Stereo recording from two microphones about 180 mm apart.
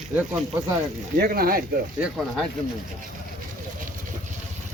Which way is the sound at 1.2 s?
55° right (ahead or behind).